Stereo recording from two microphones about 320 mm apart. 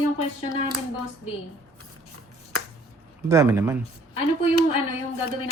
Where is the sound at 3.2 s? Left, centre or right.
Centre.